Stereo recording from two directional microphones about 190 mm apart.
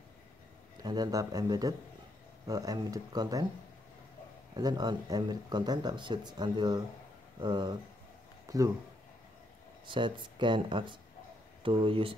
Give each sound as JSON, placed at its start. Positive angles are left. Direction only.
{"t": 0.8, "sound": "speech", "side_deg": -20}
{"t": 4.6, "sound": "speech", "side_deg": -20}
{"t": 9.8, "sound": "speech", "side_deg": -25}